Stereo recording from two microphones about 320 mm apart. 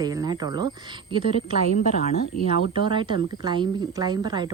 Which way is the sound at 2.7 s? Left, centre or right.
Centre.